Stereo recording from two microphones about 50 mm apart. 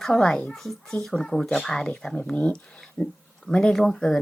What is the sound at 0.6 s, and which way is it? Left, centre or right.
A child's voice, centre.